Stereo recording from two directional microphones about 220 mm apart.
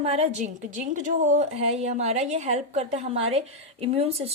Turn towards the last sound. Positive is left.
turn(degrees=-25)  # may be behind; listen again after turning